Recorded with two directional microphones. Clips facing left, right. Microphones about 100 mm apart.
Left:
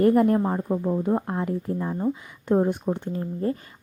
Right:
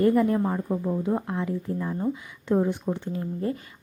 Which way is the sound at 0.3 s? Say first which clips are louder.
Left 2 dB; 25° left (ahead or behind).